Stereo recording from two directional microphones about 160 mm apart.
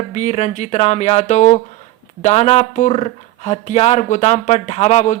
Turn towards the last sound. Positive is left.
turn(degrees=45)  # may be behind; listen again after turning